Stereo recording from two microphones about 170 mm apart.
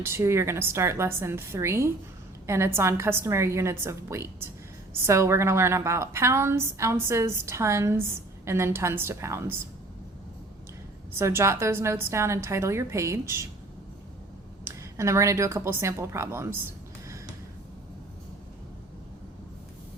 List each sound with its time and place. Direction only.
0.0 s a woman's voice: 15° right (ahead or behind)
11.2 s a woman's voice: 15° right (ahead or behind)
14.6 s speech: 15° right (ahead or behind)